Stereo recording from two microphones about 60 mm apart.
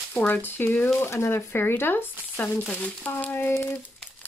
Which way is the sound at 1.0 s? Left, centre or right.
Left.